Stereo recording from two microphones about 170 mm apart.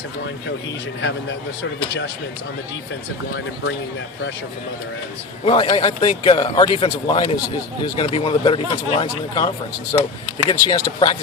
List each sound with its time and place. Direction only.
5.5 s a man's voice: 30° left (ahead or behind)